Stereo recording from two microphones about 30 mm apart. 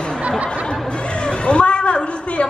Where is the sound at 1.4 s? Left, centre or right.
Left.